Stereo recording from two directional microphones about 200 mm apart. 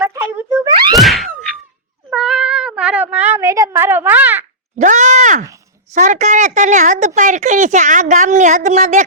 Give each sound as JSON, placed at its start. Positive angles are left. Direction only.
{"t": 0.0, "sound": "wail", "side_deg": -15}
{"t": 0.9, "sound": "thunk", "side_deg": 0}
{"t": 2.0, "sound": "meow", "side_deg": 0}
{"t": 4.8, "sound": "a woman's voice", "side_deg": -35}